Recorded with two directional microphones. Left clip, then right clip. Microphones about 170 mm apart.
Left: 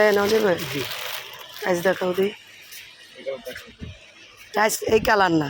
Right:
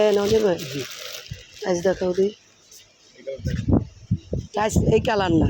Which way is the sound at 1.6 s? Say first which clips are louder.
Even; 20° right (ahead or behind).